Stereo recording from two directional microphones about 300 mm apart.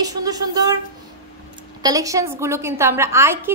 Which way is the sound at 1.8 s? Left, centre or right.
Centre.